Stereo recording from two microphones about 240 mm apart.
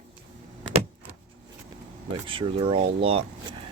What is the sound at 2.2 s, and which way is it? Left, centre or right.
Speech, right.